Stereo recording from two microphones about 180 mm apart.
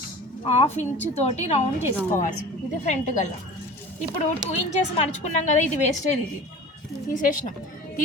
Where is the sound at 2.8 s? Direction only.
40° left (ahead or behind).